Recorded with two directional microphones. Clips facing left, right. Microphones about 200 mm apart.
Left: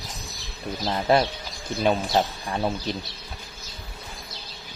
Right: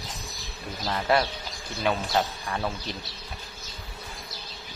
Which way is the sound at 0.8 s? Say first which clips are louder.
Left 3 dB; 25° left (ahead or behind).